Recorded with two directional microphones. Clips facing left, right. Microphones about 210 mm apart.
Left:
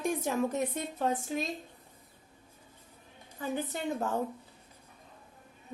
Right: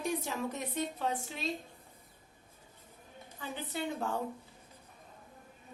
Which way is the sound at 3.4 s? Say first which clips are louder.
Left 4 dB; 45° left (ahead or behind).